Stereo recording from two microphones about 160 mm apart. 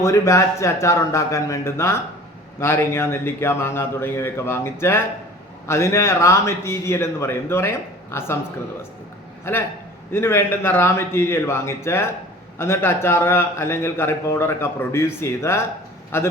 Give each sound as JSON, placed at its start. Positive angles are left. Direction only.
{"t": 0.0, "sound": "a man's voice", "side_deg": 20}
{"t": 9.4, "sound": "a man's voice", "side_deg": 15}